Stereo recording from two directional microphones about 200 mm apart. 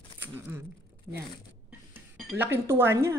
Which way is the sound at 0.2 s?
10° right (ahead or behind).